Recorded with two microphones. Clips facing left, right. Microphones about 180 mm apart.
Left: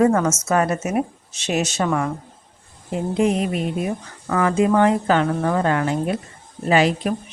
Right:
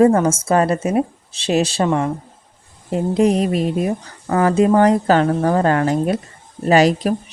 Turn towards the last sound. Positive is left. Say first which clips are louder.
# right 4 dB
turn(degrees=-40)  # may be behind; listen again after turning